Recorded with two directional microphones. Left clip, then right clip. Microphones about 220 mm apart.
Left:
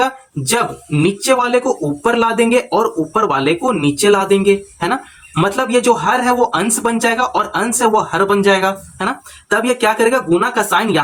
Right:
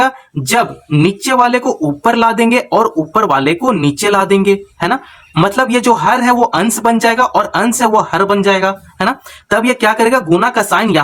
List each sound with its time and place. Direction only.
0.0 s speech: 25° right (ahead or behind)